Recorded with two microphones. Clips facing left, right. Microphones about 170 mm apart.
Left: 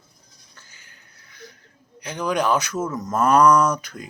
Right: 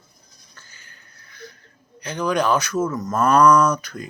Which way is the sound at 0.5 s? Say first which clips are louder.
Right 2 dB; 15° left (ahead or behind).